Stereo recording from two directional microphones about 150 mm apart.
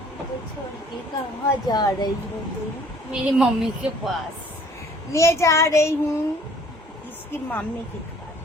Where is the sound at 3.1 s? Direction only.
5° right (ahead or behind).